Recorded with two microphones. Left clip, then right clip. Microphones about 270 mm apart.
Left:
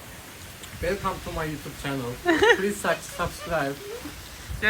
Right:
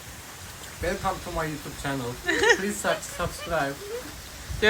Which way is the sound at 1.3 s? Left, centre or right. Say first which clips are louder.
Right 1 dB; centre.